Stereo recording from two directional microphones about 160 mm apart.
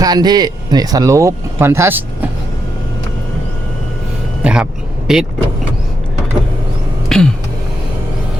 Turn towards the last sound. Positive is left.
turn(degrees=5)  # may be behind; listen again after turning